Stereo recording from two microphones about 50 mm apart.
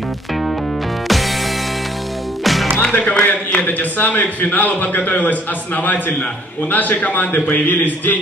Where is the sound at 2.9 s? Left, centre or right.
Left.